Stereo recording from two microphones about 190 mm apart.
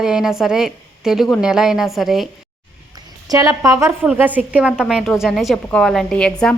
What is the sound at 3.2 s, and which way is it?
A woman's voice, 20° right (ahead or behind).